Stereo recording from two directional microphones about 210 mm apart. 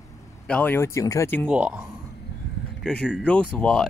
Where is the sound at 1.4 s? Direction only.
5° right (ahead or behind).